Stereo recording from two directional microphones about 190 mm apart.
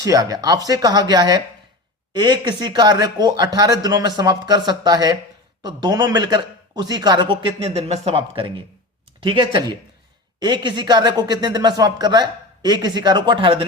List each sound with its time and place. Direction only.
0.0 s speech: 20° right (ahead or behind)